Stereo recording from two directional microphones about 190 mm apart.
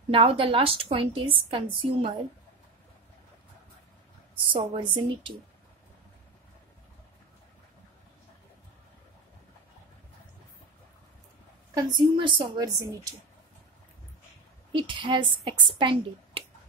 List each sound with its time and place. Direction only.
0.1 s a woman's voice: 30° right (ahead or behind)
4.5 s a woman's voice: 25° right (ahead or behind)
11.7 s a woman's voice: 25° right (ahead or behind)
14.7 s a woman's voice: 25° right (ahead or behind)